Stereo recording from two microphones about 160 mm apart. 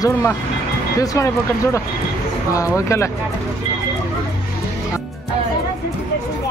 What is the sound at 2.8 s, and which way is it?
Speech, 20° left (ahead or behind).